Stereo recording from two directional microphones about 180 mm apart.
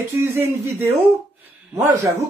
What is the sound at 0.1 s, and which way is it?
Speech, 15° right (ahead or behind).